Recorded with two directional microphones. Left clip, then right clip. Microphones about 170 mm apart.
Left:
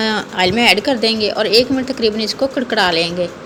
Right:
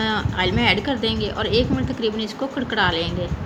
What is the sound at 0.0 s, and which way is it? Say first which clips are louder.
Speech: left 6 dB; 15° left (ahead or behind).